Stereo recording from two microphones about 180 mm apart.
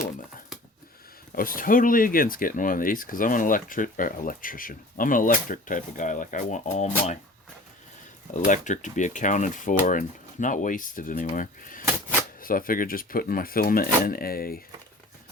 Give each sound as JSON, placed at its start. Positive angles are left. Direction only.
{"t": 1.4, "sound": "speech", "side_deg": 50}
{"t": 8.3, "sound": "speech", "side_deg": 45}